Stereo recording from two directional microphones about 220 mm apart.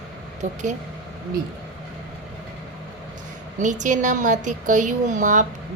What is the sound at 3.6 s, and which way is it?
Speech, 35° right (ahead or behind).